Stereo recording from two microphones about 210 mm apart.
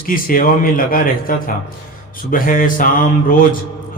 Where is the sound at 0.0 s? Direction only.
40° left (ahead or behind).